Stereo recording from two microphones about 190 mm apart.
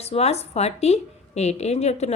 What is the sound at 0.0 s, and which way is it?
A woman's voice, 35° left (ahead or behind).